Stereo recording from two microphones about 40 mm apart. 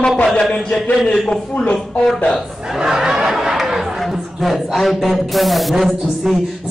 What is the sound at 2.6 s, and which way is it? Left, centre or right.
Speech, centre.